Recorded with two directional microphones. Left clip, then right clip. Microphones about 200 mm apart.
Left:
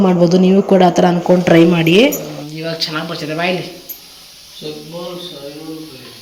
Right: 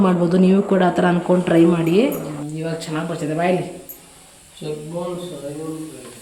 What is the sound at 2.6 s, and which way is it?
Speech, 15° right (ahead or behind).